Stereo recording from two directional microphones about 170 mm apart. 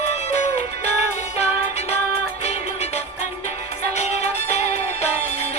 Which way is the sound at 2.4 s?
40° left (ahead or behind).